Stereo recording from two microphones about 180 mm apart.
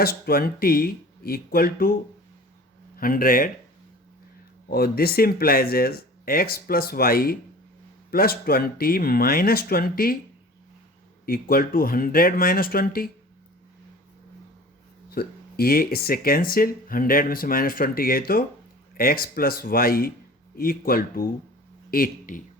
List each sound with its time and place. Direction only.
0.0 s speech: 55° left (ahead or behind)
4.7 s speech: 55° left (ahead or behind)
11.3 s speech: 55° left (ahead or behind)
15.1 s speech: 55° left (ahead or behind)